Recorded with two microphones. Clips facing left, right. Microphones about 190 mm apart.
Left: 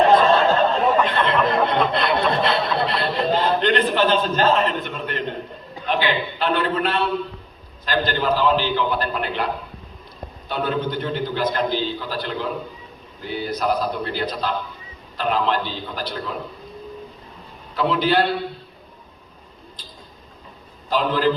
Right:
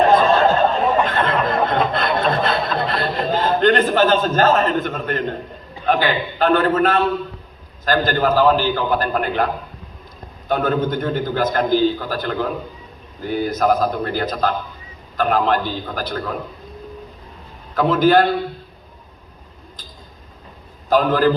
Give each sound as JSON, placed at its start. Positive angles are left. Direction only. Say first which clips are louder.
{"t": 0.1, "sound": "a sound", "louder": "right 1 dB", "side_deg": -45}
{"t": 5.8, "sound": "a man's voice", "louder": "right 4 dB", "side_deg": -45}
{"t": 10.5, "sound": "a man's voice", "louder": "right 5 dB", "side_deg": -45}
{"t": 17.7, "sound": "a man's voice", "louder": "right 5 dB", "side_deg": -45}
{"t": 20.9, "sound": "a man's voice", "louder": "right 4 dB", "side_deg": -45}